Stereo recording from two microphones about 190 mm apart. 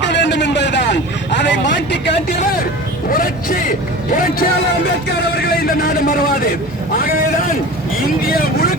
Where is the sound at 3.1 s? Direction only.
50° left (ahead or behind).